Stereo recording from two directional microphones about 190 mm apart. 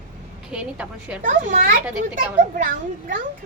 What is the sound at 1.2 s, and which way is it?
Speech, 45° right (ahead or behind).